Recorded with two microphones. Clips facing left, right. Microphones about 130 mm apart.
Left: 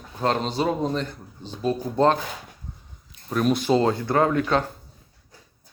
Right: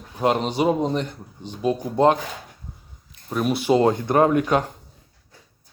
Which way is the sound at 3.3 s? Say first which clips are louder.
Right 1 dB; 10° right (ahead or behind).